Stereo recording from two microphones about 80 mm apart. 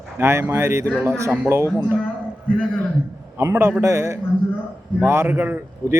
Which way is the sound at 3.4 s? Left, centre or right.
Right.